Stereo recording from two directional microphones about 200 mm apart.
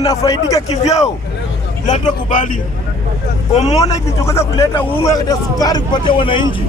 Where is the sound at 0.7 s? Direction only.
35° left (ahead or behind).